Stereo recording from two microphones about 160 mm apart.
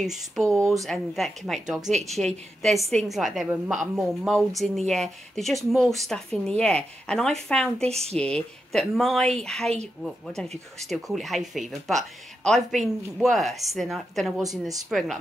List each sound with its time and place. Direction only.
0.0 s speech: centre (ahead or behind)
7.9 s a woman's voice: 40° right (ahead or behind)
8.2 s speech: 5° left (ahead or behind)